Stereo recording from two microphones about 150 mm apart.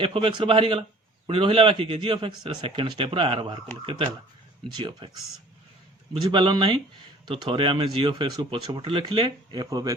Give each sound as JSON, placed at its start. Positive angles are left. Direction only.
{"t": 0.0, "sound": "speech", "side_deg": -35}
{"t": 6.2, "sound": "speech", "side_deg": -30}